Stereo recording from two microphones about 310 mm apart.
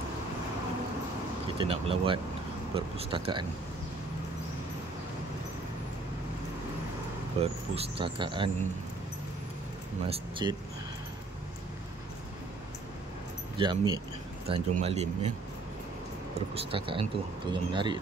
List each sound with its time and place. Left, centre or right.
1.6 s speech: centre
7.3 s speech: centre
10.0 s speech: centre
13.6 s speech: centre
16.3 s speech: centre